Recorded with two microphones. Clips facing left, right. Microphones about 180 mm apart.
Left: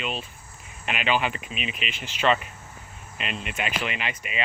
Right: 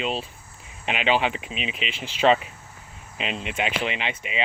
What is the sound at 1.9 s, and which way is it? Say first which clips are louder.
Speech: right 4 dB; 30° right (ahead or behind).